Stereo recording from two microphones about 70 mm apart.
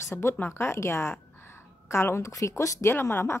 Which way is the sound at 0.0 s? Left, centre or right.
Left.